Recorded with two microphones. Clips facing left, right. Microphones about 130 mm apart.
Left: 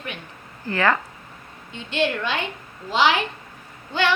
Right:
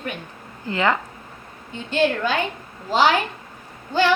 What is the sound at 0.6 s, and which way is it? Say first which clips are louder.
Speech: even; 20° right (ahead or behind).